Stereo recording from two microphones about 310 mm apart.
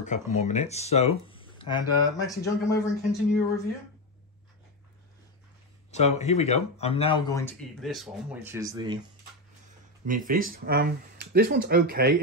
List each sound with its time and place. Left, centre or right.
0.0 s speech: left
5.9 s speech: left; by 9.0 s centre
10.0 s speech: right